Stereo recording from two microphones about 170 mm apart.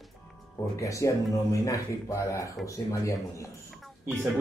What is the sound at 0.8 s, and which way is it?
Speech, 20° left (ahead or behind).